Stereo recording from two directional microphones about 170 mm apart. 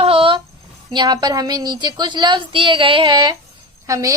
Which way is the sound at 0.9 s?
25° right (ahead or behind).